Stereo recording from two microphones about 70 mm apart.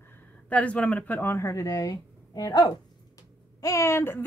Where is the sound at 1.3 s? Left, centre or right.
Left.